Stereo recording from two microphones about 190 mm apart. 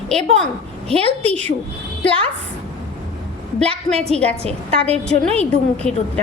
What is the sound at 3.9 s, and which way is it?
Speech, 35° right (ahead or behind).